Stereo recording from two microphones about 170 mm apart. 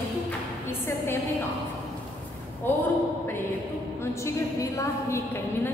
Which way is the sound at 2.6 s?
10° left (ahead or behind).